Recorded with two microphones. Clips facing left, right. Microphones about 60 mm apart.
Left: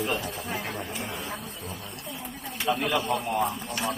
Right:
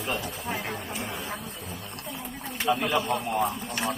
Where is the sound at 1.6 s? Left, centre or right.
Left.